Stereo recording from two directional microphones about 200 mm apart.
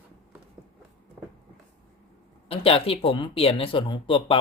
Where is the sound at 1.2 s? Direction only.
10° right (ahead or behind).